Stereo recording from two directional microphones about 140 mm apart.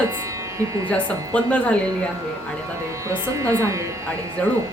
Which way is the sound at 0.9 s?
10° left (ahead or behind).